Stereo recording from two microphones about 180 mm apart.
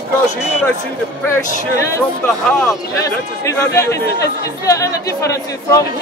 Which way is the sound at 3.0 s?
15° left (ahead or behind).